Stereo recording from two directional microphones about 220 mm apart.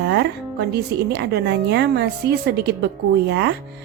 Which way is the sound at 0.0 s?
50° right (ahead or behind).